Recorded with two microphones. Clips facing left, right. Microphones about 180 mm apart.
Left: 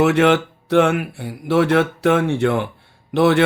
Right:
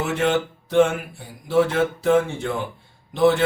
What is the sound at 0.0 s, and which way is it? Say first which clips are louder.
Speech: left 7 dB; 70° left (ahead or behind).